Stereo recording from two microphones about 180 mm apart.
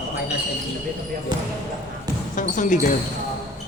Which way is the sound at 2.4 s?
45° left (ahead or behind).